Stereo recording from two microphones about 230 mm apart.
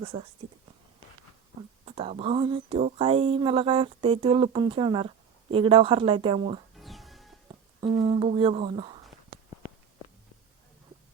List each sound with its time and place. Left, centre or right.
0.0 s speech: right
1.8 s speech: right
6.7 s music: centre
7.4 s speech: right